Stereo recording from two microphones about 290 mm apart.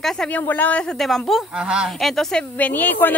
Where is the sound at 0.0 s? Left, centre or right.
Centre.